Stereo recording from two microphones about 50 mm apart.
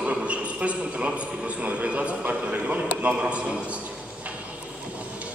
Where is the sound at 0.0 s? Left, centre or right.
Right.